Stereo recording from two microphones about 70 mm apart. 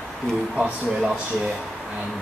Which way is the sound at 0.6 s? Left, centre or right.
Centre.